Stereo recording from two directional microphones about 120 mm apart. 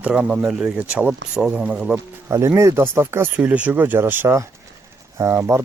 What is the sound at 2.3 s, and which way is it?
Speech, 25° right (ahead or behind).